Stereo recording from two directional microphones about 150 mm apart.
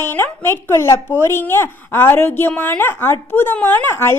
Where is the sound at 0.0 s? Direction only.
15° left (ahead or behind).